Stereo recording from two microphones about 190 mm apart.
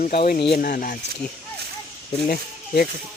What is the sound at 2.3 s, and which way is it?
Speech, 50° left (ahead or behind).